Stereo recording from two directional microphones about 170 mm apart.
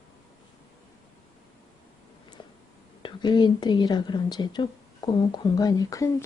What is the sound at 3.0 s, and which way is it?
A woman's voice, 25° left (ahead or behind).